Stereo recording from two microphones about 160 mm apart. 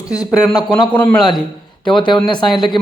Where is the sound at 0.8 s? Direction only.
30° left (ahead or behind).